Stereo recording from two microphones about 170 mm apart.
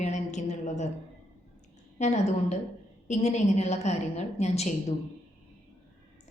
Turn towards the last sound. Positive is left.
turn(degrees=40)  # may be behind; listen again after turning